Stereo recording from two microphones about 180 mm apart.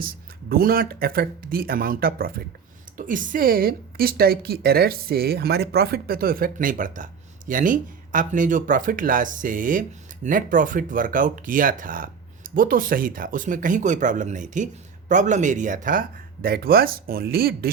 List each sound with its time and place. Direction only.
0.0 s speech: 55° right (ahead or behind)